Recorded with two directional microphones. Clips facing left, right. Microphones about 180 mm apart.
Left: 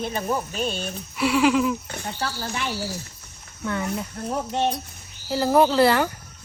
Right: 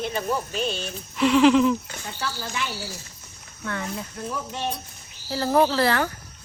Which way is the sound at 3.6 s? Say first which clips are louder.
Left 4 dB; 15° left (ahead or behind).